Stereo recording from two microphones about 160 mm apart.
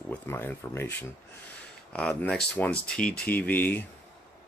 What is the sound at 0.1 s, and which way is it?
Speech, 15° left (ahead or behind).